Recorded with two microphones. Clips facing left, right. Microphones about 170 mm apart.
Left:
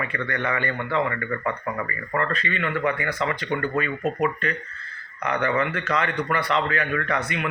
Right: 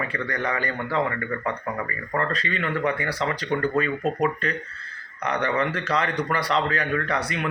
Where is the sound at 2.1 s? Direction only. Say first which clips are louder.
Even; 35° right (ahead or behind).